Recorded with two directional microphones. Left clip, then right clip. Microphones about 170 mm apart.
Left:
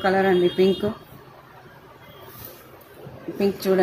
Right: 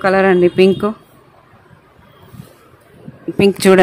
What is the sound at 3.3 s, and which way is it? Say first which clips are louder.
Speech: right 11 dB; 60° right (ahead or behind).